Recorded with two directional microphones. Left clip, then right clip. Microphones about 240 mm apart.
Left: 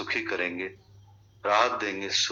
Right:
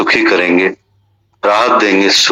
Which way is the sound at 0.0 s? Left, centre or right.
Right.